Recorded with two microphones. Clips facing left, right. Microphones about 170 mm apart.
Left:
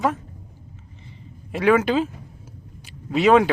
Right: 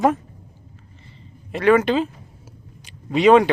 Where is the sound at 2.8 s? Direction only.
Centre (ahead or behind).